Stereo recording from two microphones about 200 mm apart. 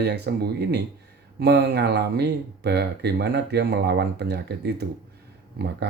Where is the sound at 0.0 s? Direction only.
55° right (ahead or behind).